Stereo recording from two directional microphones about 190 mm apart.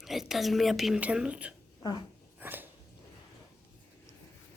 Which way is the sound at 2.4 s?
10° right (ahead or behind).